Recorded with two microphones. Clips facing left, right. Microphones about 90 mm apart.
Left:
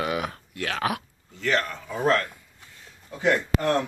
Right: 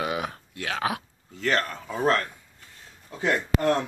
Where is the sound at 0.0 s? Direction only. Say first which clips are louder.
Left 1 dB; 25° right (ahead or behind).